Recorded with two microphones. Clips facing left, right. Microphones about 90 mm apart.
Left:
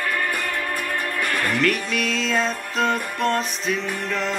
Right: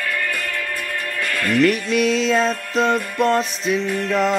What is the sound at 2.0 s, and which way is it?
Music, centre (ahead or behind).